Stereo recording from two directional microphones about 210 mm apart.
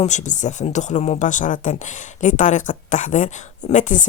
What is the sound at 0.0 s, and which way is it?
Speech, 35° left (ahead or behind).